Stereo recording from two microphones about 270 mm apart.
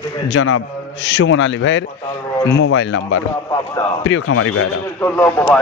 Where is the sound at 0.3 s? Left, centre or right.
Left.